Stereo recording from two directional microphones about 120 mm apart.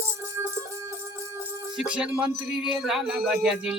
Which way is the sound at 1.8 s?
5° right (ahead or behind).